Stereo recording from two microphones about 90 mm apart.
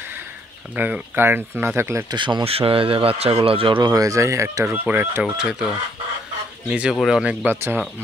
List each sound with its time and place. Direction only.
0.7 s speech: 20° right (ahead or behind)
2.0 s speech: 60° right (ahead or behind); by 3.8 s 80° right
3.8 s speech: 40° right (ahead or behind)
4.8 s speech: 25° right (ahead or behind)
5.2 s speech: 10° right (ahead or behind)
6.7 s speech: 10° right (ahead or behind)
7.2 s speech: 20° right (ahead or behind)